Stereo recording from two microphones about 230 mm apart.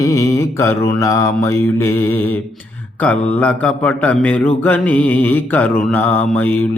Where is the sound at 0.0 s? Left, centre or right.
Centre.